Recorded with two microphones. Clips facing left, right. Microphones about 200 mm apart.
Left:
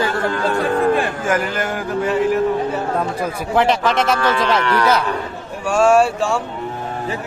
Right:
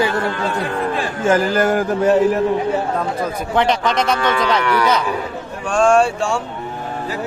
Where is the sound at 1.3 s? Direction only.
35° right (ahead or behind).